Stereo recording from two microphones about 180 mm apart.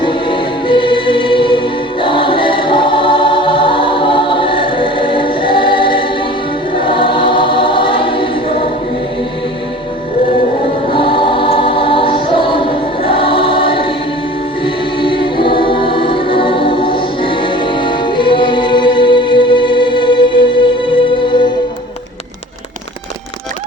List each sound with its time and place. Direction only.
0.0 s music: 30° left (ahead or behind)
6.8 s choir: 30° left (ahead or behind)
10.9 s choir: 30° left (ahead or behind)
14.6 s music: 30° left (ahead or behind)